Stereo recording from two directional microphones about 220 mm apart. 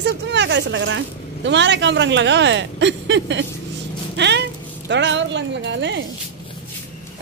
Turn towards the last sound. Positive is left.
turn(degrees=-55)  # may be behind; listen again after turning